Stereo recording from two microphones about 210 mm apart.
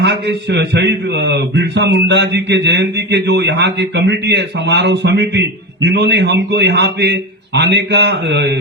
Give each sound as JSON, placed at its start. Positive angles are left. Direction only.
{"t": 0.0, "sound": "a man's voice", "side_deg": -55}